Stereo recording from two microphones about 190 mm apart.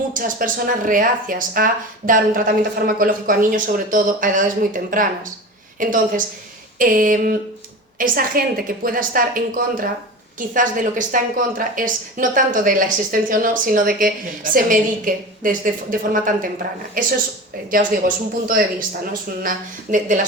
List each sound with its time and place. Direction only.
0.1 s a woman's voice: 45° right (ahead or behind)
18.4 s a woman's voice: 45° right (ahead or behind)